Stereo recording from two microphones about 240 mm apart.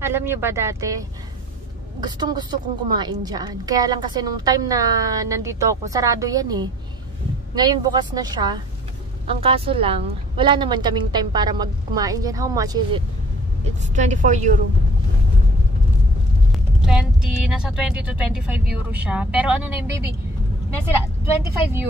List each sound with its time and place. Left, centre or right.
0.0 s a woman's voice: centre
2.0 s a woman's voice: centre
13.9 s a woman's voice: right
16.5 s speech: centre